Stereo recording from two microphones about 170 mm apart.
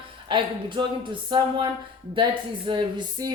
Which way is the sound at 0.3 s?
30° right (ahead or behind).